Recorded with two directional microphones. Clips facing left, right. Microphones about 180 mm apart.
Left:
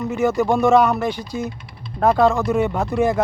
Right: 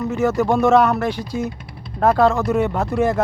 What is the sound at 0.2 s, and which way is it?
Speech, 5° right (ahead or behind).